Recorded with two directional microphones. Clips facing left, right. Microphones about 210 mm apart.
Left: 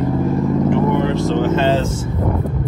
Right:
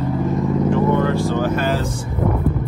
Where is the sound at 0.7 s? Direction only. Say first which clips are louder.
Right 1 dB; 20° left (ahead or behind).